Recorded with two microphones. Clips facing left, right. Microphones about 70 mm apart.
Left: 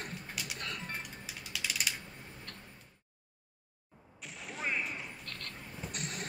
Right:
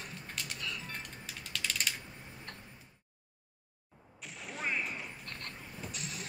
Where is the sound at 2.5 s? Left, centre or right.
Right.